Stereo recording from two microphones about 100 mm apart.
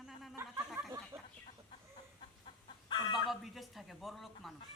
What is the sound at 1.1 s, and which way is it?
Speech, 25° right (ahead or behind).